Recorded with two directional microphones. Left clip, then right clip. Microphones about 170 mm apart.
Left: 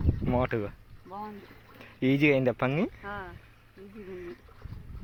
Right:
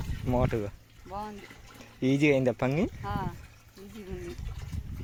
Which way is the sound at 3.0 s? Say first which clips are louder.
Right 3 dB; 90° right.